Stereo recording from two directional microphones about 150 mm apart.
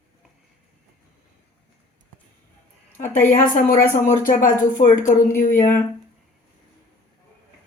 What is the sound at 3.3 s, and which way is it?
Speech, 70° left (ahead or behind).